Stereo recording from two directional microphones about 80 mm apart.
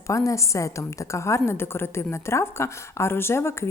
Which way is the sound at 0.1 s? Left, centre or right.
Left.